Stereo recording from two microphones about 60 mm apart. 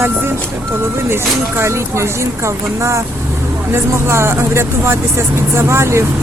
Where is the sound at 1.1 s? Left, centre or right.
Right.